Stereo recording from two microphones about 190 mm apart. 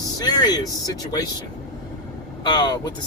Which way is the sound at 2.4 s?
20° left (ahead or behind).